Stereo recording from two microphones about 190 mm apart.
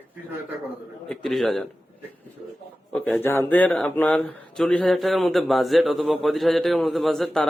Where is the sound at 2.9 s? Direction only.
10° left (ahead or behind).